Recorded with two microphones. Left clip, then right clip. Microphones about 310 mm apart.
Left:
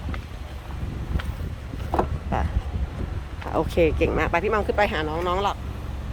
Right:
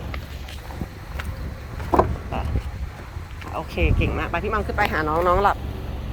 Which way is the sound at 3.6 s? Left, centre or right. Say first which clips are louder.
Left 6 dB; left.